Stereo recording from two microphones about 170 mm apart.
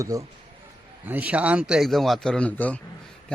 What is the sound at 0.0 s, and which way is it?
A man's voice, 20° right (ahead or behind).